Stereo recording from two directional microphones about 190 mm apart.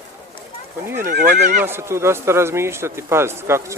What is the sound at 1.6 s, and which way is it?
Speech, 15° right (ahead or behind).